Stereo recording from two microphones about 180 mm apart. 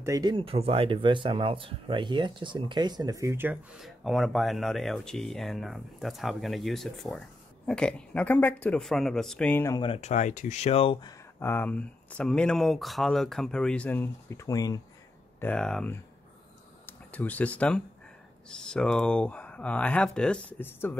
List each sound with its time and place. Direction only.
0.0 s speech: 20° right (ahead or behind)
3.8 s speech: centre (ahead or behind)
9.8 s speech: 35° left (ahead or behind)
15.4 s speech: 5° left (ahead or behind)
17.1 s speech: 10° left (ahead or behind)